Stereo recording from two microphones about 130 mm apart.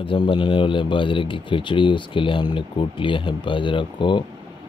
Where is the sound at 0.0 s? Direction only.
40° left (ahead or behind).